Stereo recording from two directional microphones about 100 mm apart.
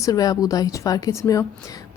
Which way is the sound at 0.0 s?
40° left (ahead or behind).